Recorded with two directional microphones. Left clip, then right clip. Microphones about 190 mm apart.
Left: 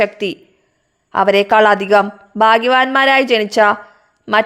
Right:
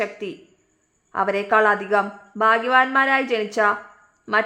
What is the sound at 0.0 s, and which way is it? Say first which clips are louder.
A woman's voice: left 10 dB; 40° left (ahead or behind).